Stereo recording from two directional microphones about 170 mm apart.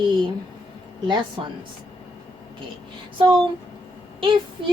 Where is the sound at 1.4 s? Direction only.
30° right (ahead or behind).